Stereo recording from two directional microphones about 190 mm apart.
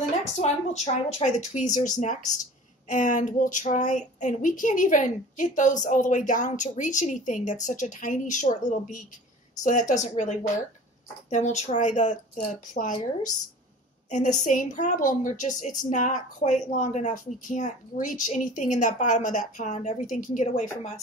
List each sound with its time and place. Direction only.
0.4 s speech: 35° left (ahead or behind)
14.1 s speech: 40° left (ahead or behind)